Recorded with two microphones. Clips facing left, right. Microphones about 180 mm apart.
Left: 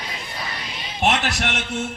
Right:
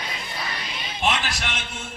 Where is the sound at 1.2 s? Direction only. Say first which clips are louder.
Left 6 dB; 60° left (ahead or behind).